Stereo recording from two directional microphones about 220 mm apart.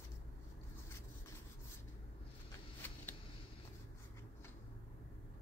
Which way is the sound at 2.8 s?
10° left (ahead or behind).